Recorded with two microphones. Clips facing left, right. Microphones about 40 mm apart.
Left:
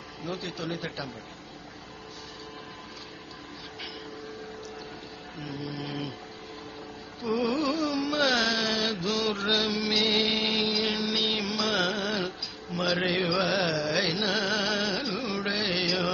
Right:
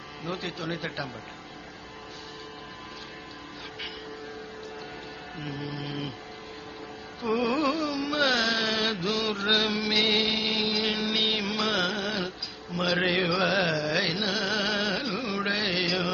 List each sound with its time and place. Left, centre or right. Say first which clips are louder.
0.7 s carnatic music: right 3 dB; right
5.8 s music: left 1 dB; centre
7.3 s carnatic music: right 1 dB; right
7.8 s carnatic music: even; centre
9.0 s mantra: even; centre
9.5 s music: right 3 dB; right
10.2 s a sound: even; centre; by 11.3 s right
11.4 s music: right 1 dB; right
11.7 s carnatic music: even; centre
12.8 s music: right 1 dB; centre
13.7 s carnatic music: even; centre
14.3 s music: even; centre
14.9 s carnatic music: right 1 dB; centre
15.7 s music: even; centre